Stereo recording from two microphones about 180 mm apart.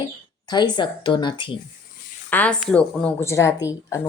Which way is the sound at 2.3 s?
10° left (ahead or behind).